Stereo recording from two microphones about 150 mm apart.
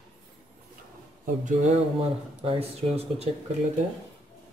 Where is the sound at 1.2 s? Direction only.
60° right (ahead or behind).